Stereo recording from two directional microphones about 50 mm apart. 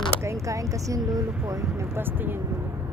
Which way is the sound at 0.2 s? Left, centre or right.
Right.